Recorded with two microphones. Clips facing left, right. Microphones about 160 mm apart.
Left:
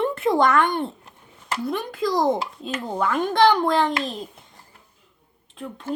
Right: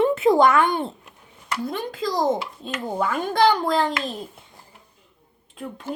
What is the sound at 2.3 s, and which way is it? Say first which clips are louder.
A child's voice: left 1 dB; 5° right (ahead or behind).